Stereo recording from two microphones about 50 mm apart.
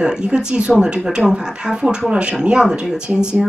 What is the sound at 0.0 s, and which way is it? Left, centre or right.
Speech, centre.